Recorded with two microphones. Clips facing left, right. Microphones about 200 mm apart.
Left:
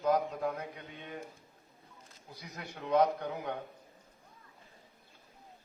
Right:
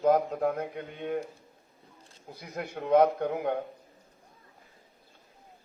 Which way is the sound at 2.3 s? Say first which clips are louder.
Right 9 dB; 55° right (ahead or behind).